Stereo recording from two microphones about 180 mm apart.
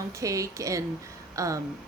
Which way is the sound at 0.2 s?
15° right (ahead or behind).